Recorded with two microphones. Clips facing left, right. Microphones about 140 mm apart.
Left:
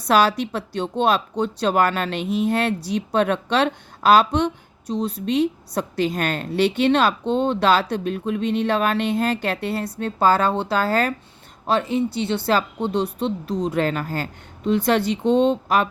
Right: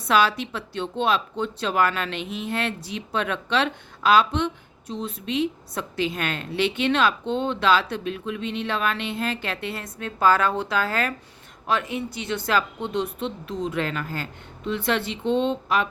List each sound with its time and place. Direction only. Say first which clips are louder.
0.0 s speech: left 3 dB; 40° left (ahead or behind)